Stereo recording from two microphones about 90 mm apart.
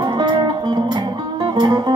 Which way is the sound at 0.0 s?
60° right (ahead or behind).